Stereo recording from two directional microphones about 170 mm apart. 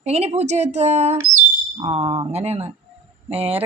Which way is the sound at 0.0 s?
40° right (ahead or behind).